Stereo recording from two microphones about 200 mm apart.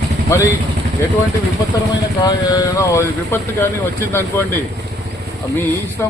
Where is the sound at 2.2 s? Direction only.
15° left (ahead or behind).